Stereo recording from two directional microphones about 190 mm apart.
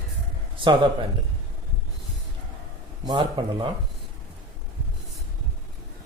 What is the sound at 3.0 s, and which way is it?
Speech, 25° right (ahead or behind).